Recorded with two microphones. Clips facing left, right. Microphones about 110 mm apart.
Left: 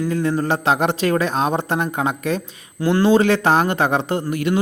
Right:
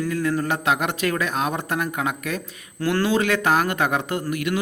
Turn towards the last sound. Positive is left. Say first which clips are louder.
# left 4 dB
turn(degrees=30)  # may be behind; listen again after turning